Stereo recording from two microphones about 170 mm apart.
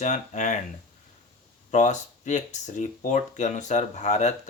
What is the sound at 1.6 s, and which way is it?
Speech, 45° left (ahead or behind).